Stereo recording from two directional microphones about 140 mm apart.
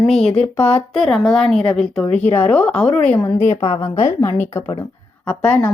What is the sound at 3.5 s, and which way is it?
Speech, 45° left (ahead or behind).